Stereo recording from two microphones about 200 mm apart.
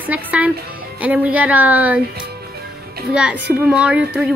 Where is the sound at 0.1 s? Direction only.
10° right (ahead or behind).